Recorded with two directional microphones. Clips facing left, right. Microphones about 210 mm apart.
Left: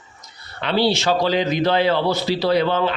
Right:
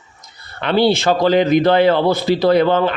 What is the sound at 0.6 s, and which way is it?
Speech, 55° right (ahead or behind).